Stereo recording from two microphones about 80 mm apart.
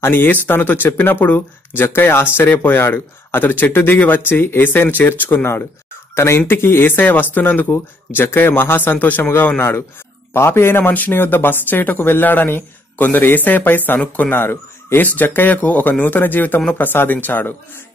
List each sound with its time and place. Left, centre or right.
0.0 s speech: left